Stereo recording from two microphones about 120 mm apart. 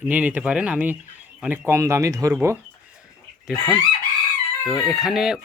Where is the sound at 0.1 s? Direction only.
15° right (ahead or behind).